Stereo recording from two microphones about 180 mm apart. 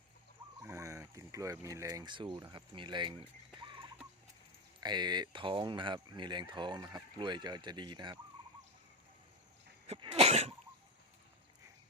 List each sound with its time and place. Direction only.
0.6 s speech: 15° right (ahead or behind)
9.8 s sneeze: 35° right (ahead or behind)